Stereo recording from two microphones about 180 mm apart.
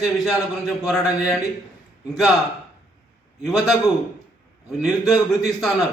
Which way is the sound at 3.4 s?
Centre (ahead or behind).